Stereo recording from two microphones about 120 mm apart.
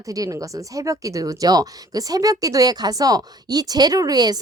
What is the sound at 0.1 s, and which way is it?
A woman's voice, 30° right (ahead or behind).